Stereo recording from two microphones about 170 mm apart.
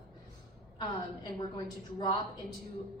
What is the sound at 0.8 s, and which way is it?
A woman's voice, 30° left (ahead or behind).